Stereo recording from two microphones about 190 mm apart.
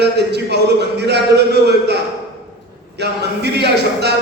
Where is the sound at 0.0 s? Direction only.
60° right (ahead or behind).